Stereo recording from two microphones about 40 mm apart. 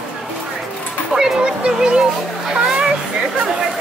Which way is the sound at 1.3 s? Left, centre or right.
Right.